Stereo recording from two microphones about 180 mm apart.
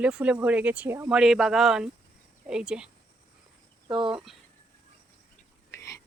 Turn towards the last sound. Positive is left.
turn(degrees=15)  # may be behind; listen again after turning